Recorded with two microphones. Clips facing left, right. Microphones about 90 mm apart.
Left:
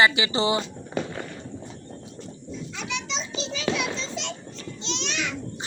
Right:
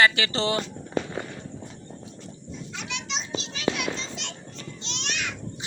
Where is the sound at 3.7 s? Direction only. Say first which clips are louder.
Even; 15° right (ahead or behind).